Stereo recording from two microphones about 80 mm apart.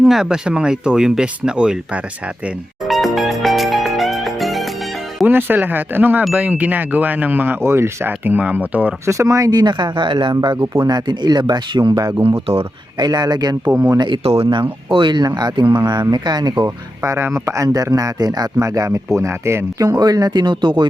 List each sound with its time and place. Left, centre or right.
0.0 s speech: centre
2.8 s music: centre
5.2 s speech: right
9.0 s speech: right
10.8 s speech: right
11.9 s speech: right
13.0 s speech: right
13.7 s speech: centre
14.0 s speech: right
15.4 s speech: right
16.6 s speech: right
19.8 s speech: right